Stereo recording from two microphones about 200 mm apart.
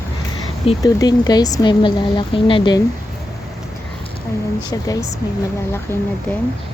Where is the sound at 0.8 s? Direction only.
20° left (ahead or behind).